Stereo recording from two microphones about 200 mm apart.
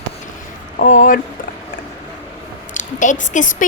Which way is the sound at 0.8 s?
40° left (ahead or behind).